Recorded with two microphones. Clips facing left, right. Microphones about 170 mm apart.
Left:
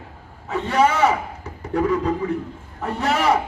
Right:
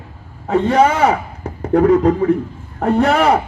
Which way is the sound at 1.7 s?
60° right (ahead or behind).